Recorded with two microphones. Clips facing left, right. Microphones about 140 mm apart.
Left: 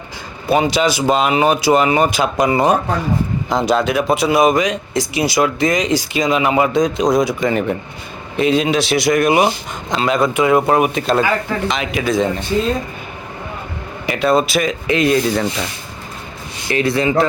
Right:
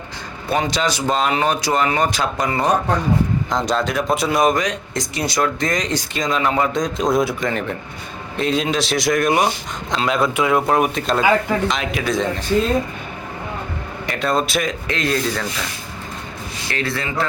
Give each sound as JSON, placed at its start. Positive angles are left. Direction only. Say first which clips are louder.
{"t": 0.4, "sound": "speech", "louder": "left 5 dB", "side_deg": 10}
{"t": 14.1, "sound": "speech", "louder": "left 5 dB", "side_deg": 5}
{"t": 16.6, "sound": "speech", "louder": "left 9 dB", "side_deg": 15}